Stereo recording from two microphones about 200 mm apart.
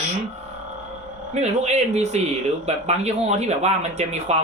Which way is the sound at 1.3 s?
35° right (ahead or behind).